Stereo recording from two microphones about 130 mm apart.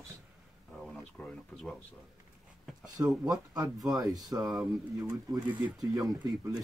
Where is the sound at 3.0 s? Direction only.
25° right (ahead or behind).